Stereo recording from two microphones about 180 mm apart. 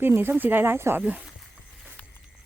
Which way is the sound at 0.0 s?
10° right (ahead or behind).